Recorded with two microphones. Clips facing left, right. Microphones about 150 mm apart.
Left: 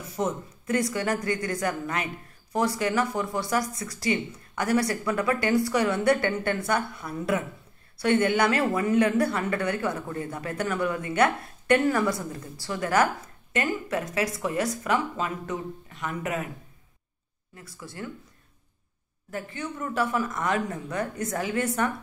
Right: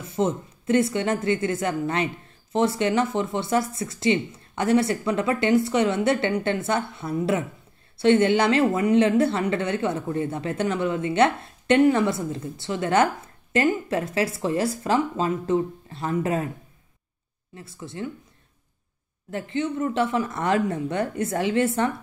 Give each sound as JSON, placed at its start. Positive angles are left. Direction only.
{"t": 0.0, "sound": "a woman's voice", "side_deg": -25}
{"t": 17.6, "sound": "a woman's voice", "side_deg": -25}
{"t": 19.3, "sound": "a woman's voice", "side_deg": -25}